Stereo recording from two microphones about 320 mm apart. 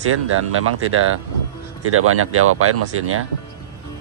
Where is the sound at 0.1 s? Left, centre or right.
Right.